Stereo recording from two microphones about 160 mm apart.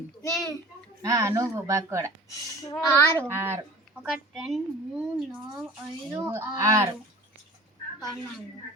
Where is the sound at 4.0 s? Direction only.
Centre (ahead or behind).